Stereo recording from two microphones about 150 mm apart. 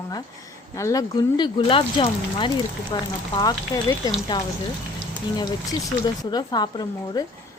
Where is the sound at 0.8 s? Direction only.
20° left (ahead or behind).